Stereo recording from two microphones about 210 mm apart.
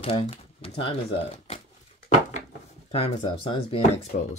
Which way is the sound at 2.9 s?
25° left (ahead or behind).